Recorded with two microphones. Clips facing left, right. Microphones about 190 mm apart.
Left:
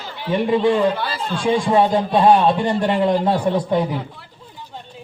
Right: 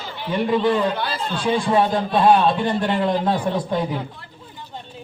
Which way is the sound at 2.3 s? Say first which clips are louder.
Left 1 dB; 10° left (ahead or behind).